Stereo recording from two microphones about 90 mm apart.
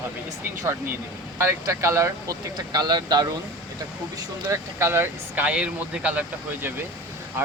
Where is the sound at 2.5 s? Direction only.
50° right (ahead or behind).